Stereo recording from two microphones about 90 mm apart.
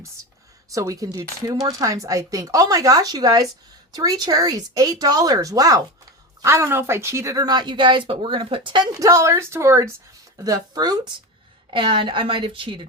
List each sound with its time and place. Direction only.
0.7 s speech: 40° right (ahead or behind)
6.4 s speech: 30° right (ahead or behind)
7.4 s speech: 55° right (ahead or behind)
8.9 s speech: 35° right (ahead or behind)
10.3 s speech: 40° right (ahead or behind)
11.7 s speech: 65° right (ahead or behind)